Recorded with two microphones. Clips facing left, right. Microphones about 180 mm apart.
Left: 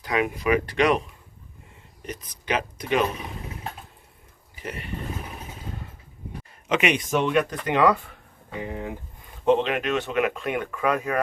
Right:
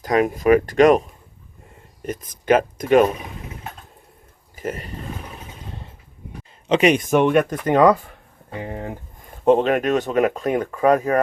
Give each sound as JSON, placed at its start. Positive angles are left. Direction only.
{"t": 0.0, "sound": "speech", "side_deg": -40}
{"t": 4.5, "sound": "speech", "side_deg": -45}
{"t": 6.7, "sound": "speech", "side_deg": -35}